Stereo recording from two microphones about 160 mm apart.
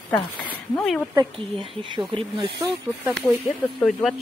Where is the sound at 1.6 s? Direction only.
30° right (ahead or behind).